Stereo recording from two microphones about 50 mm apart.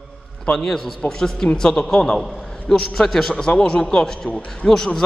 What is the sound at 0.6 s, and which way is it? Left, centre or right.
A man's voice, centre.